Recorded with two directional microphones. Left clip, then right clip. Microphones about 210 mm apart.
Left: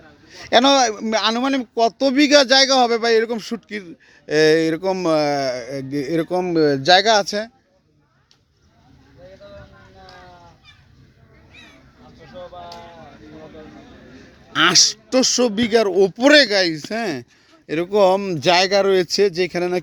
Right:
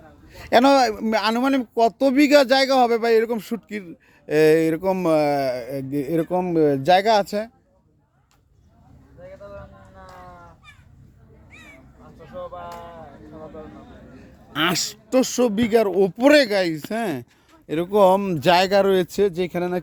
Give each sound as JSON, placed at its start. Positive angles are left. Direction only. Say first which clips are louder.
{"t": 0.3, "sound": "a man's voice", "louder": "left 1 dB", "side_deg": -15}
{"t": 14.5, "sound": "a man's voice", "louder": "left 8 dB", "side_deg": 0}